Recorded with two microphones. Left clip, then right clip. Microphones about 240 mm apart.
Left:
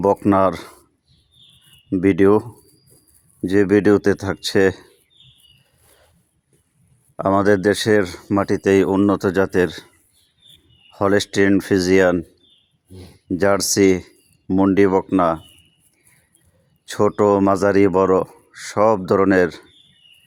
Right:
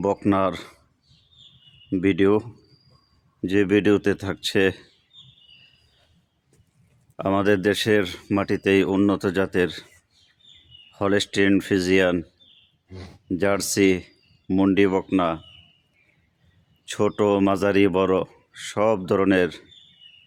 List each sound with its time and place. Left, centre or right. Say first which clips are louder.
0.0 s speech: left 6 dB; centre
1.9 s speech: left 5 dB; centre
7.4 s speech: left 4 dB; centre
10.9 s speech: left 5 dB; centre
16.8 s speech: left 5 dB; centre